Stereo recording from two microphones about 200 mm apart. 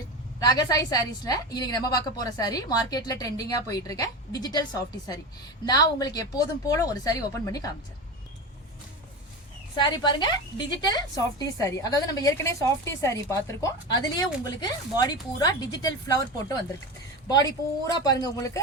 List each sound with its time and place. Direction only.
0.3 s a woman's voice: 20° left (ahead or behind)
9.7 s a woman's voice: 20° left (ahead or behind)